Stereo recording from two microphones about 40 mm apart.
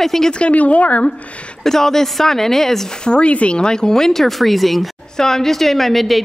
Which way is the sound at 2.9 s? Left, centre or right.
Left.